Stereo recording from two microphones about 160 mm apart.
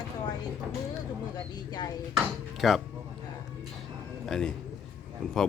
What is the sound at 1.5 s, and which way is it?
Speech, 25° left (ahead or behind).